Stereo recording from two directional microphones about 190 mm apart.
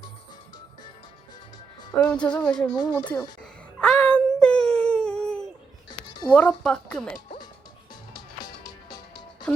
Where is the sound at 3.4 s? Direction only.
5° left (ahead or behind).